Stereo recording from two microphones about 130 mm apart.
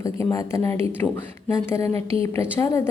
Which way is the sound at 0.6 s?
55° right (ahead or behind).